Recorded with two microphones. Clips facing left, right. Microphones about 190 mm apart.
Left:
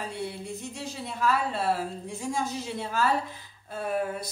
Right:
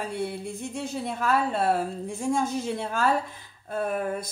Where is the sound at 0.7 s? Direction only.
55° right (ahead or behind).